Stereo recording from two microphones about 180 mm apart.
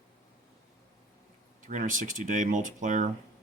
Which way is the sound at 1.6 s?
45° right (ahead or behind).